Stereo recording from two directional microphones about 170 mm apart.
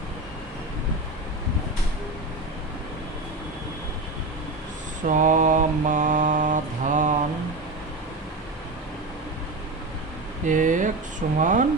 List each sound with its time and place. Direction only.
5.0 s mantra: 50° right (ahead or behind)
10.4 s speech: 50° right (ahead or behind)